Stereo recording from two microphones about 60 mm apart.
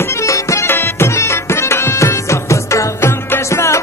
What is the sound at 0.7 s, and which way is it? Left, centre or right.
Music, left.